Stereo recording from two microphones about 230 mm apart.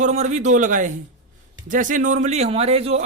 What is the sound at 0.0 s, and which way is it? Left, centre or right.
A man's voice, right.